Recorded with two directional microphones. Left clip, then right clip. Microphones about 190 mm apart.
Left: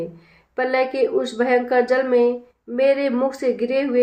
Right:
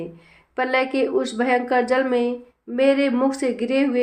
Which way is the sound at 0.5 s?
30° right (ahead or behind).